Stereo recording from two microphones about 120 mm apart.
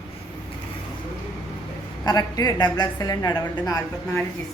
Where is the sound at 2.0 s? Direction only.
35° left (ahead or behind).